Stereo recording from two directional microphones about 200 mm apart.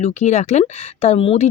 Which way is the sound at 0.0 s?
35° left (ahead or behind).